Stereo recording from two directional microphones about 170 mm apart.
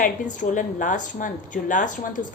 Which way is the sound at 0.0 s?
50° left (ahead or behind).